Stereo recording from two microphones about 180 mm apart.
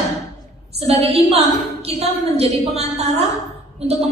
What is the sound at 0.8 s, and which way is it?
A woman's voice, 35° right (ahead or behind).